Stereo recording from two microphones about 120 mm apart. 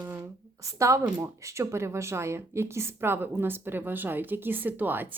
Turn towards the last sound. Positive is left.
turn(degrees=-15)  # may be behind; listen again after turning